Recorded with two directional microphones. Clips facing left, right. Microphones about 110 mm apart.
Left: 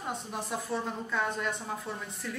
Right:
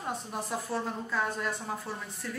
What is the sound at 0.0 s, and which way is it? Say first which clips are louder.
A woman's voice: right 1 dB; centre (ahead or behind).